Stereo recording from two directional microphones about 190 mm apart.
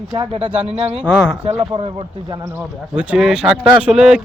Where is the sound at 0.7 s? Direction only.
35° right (ahead or behind).